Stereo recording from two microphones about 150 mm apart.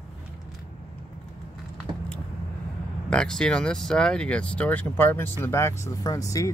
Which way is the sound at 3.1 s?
5° left (ahead or behind).